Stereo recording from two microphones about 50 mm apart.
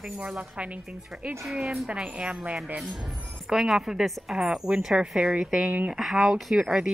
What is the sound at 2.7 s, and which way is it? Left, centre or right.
Speech, centre.